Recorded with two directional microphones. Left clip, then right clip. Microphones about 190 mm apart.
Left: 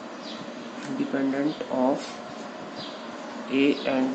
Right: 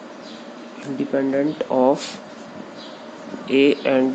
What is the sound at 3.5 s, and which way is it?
Speech, 55° right (ahead or behind).